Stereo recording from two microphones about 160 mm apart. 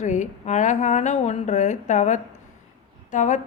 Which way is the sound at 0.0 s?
50° left (ahead or behind).